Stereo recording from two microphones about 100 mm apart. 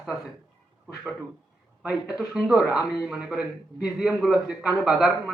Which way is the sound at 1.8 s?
5° right (ahead or behind).